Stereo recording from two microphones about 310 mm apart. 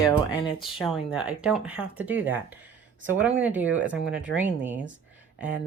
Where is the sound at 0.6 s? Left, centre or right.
Centre.